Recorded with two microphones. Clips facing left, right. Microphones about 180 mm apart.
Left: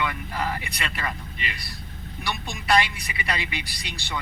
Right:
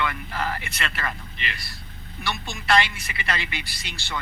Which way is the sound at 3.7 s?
Centre (ahead or behind).